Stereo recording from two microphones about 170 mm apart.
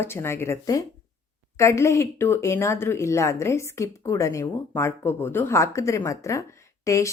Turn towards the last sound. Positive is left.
turn(degrees=20)  # may be behind; listen again after turning